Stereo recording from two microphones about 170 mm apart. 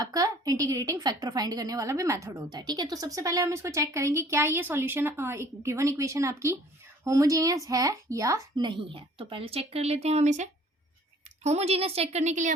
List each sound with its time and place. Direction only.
0.0 s a woman's voice: 20° right (ahead or behind); by 12.5 s 45° right (ahead or behind)